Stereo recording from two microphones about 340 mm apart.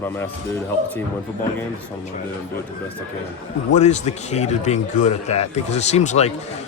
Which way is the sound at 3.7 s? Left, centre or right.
Left.